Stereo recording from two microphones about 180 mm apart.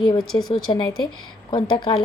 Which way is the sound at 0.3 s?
25° left (ahead or behind).